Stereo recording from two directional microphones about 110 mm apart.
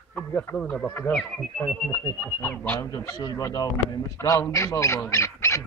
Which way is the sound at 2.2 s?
15° left (ahead or behind).